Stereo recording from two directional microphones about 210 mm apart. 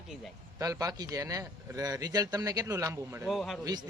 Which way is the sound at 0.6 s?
15° right (ahead or behind).